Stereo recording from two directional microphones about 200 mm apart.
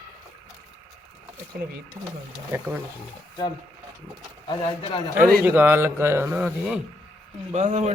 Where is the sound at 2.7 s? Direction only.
10° right (ahead or behind).